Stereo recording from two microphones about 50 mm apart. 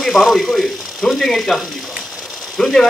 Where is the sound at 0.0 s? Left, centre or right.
Centre.